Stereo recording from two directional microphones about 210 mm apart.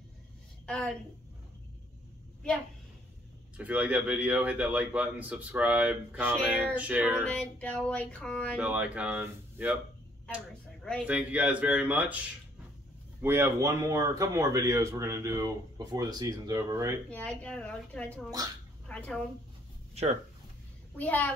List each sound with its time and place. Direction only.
0.7 s a sound: 5° left (ahead or behind)
3.5 s speech: 5° right (ahead or behind)
7.2 s a sound: 5° left (ahead or behind)
8.5 s speech: 5° right (ahead or behind)
10.3 s speech: 5° left (ahead or behind)
13.2 s speech: 10° right (ahead or behind)
17.1 s a sound: 5° left (ahead or behind)
18.9 s speech: 5° left (ahead or behind)
19.9 s speech: 30° right (ahead or behind)
21.0 s a child's voice: 10° left (ahead or behind)